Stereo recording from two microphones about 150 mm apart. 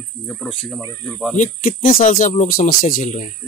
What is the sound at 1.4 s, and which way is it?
Speech, 65° left (ahead or behind).